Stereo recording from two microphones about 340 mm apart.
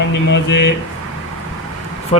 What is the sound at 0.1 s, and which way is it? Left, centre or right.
Speech, left.